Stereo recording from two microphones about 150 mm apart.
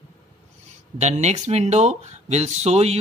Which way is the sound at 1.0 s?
50° right (ahead or behind).